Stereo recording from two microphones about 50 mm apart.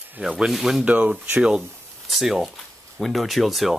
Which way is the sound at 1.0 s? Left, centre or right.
Centre.